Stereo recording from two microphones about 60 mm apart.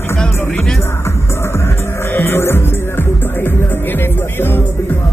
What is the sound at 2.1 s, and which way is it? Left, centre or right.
Music, left.